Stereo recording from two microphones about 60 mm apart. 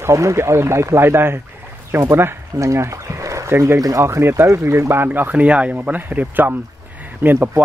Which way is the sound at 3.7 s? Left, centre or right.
Right.